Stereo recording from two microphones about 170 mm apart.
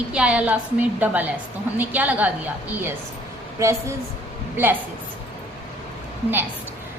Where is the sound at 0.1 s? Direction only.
5° right (ahead or behind).